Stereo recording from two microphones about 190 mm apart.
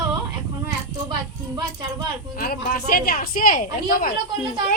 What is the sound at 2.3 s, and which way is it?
A woman's voice, 50° left (ahead or behind).